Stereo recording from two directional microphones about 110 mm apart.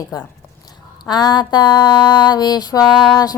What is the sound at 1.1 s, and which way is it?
Music, 40° left (ahead or behind).